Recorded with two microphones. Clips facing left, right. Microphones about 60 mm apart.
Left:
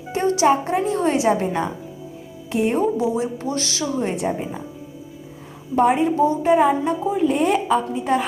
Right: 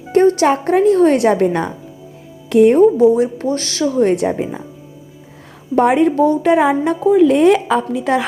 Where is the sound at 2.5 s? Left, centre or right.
Right.